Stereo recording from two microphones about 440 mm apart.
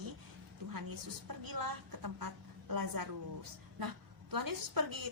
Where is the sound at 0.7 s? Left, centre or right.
Right.